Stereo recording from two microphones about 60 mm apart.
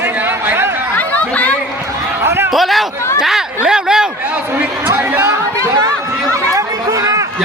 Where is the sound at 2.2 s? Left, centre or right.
Right.